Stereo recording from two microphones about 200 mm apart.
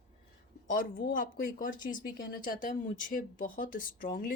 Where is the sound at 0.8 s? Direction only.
45° left (ahead or behind).